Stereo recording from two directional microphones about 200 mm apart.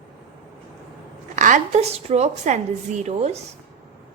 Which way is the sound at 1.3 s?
40° right (ahead or behind).